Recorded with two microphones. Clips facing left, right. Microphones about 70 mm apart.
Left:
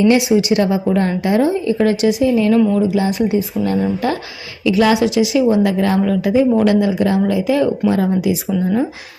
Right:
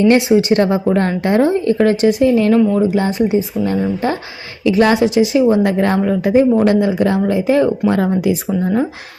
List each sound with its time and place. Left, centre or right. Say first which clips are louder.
0.1 s a woman's voice: right 2 dB; right
2.7 s a woman's voice: right 1 dB; right